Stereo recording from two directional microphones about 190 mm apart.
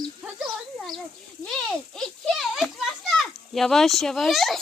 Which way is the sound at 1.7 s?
Centre (ahead or behind).